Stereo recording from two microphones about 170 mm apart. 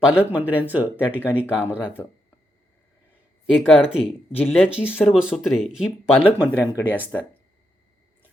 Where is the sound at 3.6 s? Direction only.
5° right (ahead or behind).